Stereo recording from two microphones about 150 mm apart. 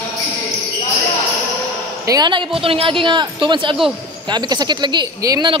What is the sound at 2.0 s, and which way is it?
A woman's voice, 30° right (ahead or behind).